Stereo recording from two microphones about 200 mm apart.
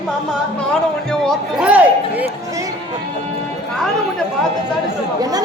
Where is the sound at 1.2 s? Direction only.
Centre (ahead or behind).